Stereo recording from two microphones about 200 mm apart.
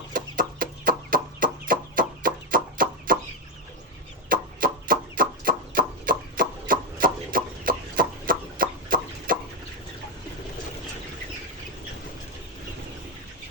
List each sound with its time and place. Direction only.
0.1 s chicken: 45° right (ahead or behind)
4.3 s fowl: 45° right (ahead or behind)